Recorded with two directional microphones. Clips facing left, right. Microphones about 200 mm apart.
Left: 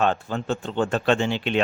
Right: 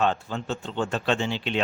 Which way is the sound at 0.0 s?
55° left (ahead or behind).